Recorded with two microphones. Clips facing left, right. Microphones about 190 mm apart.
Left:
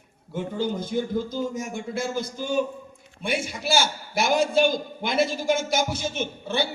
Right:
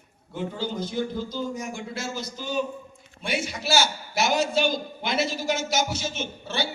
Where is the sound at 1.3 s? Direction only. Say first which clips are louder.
Left 2 dB; 50° left (ahead or behind).